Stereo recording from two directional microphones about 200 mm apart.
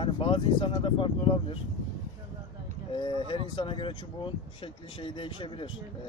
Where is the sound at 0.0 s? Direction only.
25° left (ahead or behind).